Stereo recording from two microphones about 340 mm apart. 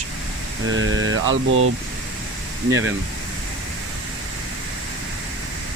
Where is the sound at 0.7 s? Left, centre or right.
Right.